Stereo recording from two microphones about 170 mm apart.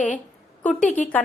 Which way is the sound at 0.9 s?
10° left (ahead or behind).